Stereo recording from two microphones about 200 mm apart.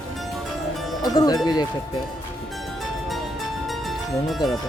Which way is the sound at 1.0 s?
20° left (ahead or behind).